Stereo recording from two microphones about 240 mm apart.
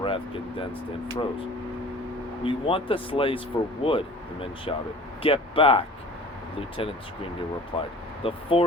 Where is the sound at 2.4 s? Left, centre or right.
Left.